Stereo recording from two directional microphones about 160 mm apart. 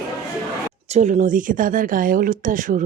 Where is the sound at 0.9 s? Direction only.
45° right (ahead or behind).